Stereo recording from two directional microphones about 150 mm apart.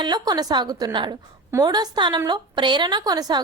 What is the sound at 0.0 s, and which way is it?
A woman's voice, 25° right (ahead or behind).